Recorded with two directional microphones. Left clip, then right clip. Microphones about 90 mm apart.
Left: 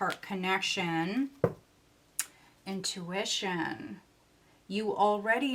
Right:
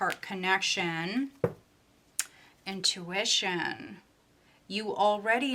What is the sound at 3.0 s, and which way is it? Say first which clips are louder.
Speech: right 1 dB; 20° right (ahead or behind).